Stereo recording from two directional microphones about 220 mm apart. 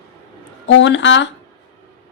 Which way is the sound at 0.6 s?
55° left (ahead or behind).